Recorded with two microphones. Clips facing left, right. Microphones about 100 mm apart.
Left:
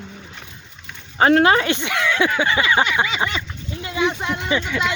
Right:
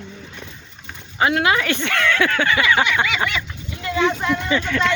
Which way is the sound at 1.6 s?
15° left (ahead or behind).